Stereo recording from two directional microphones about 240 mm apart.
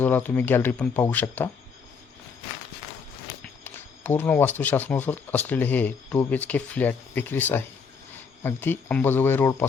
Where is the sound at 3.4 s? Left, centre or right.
Centre.